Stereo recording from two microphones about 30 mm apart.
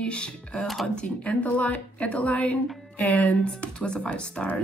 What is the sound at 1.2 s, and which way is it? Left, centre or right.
A woman's voice, left.